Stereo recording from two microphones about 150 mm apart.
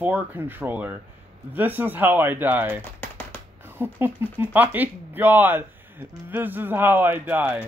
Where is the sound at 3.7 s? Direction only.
15° right (ahead or behind).